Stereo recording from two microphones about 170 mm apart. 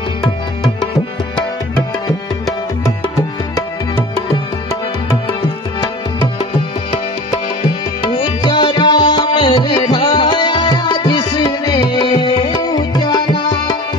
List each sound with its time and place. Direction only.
8.0 s music: 30° left (ahead or behind)